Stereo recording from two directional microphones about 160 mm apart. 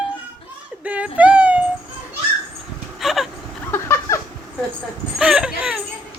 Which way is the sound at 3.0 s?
Centre (ahead or behind).